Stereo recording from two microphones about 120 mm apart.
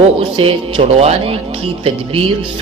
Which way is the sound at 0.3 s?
50° right (ahead or behind).